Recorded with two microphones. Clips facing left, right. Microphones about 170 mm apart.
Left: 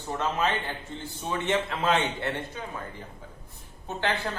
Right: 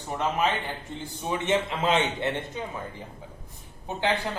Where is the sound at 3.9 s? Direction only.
15° right (ahead or behind).